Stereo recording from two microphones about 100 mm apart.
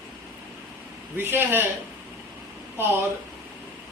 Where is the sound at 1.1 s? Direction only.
20° right (ahead or behind).